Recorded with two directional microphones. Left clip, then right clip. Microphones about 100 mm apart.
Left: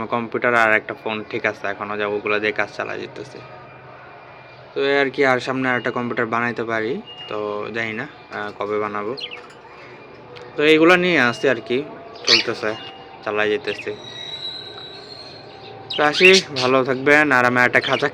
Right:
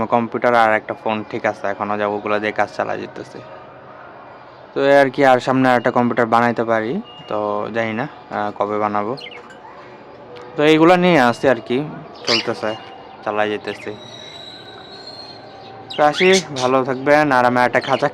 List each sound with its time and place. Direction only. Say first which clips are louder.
0.0 s a man's voice: right 5 dB; 50° right (ahead or behind)
0.4 s a man's voice: right 1 dB; 35° right (ahead or behind); by 3.2 s 55° right (ahead or behind)
4.7 s speech: right 6 dB; 60° right (ahead or behind)
10.5 s a man's voice: right 1 dB; 55° right (ahead or behind)
16.0 s speech: left 1 dB; 30° right (ahead or behind)